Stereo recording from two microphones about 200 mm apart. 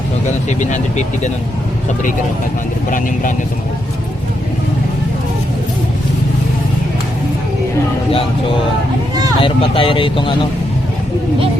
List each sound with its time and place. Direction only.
0.6 s speech: 35° left (ahead or behind)
9.4 s speech: 25° left (ahead or behind)